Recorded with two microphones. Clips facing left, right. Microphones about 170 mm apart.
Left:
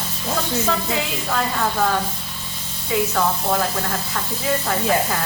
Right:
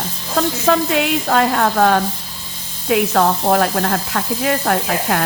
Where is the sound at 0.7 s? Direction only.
70° right (ahead or behind).